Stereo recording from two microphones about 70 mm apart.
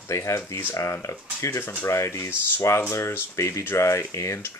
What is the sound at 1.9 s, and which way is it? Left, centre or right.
Speech, left.